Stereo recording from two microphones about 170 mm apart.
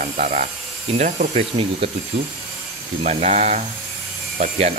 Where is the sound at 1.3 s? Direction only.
35° right (ahead or behind).